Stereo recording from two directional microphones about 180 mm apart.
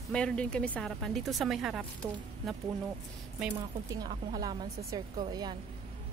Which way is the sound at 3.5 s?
20° right (ahead or behind).